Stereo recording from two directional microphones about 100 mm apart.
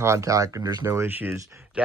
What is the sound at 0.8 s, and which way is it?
Speech, 25° right (ahead or behind).